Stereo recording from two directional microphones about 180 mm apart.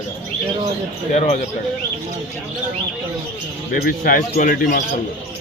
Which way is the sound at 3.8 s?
50° left (ahead or behind).